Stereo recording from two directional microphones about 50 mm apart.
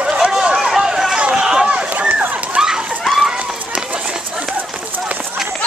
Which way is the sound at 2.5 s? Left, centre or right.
Centre.